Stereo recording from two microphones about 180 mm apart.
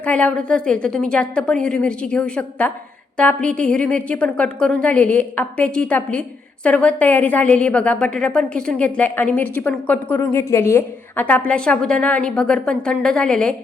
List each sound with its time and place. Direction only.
0.0 s a woman's voice: 10° left (ahead or behind)